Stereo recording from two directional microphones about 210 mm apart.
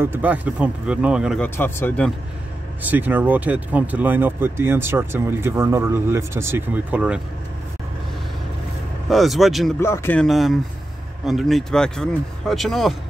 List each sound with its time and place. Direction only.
0.0 s speech: 10° right (ahead or behind)
1.4 s speech: 10° left (ahead or behind)
2.8 s speech: 10° right (ahead or behind)
9.1 s speech: centre (ahead or behind)
9.8 s speech: 10° left (ahead or behind)